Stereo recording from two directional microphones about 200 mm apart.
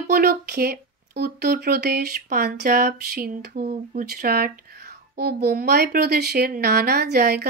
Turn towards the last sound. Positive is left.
turn(degrees=-55)  # may be behind; listen again after turning